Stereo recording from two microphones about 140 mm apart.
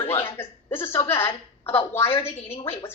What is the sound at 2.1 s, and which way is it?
Speech, 40° left (ahead or behind).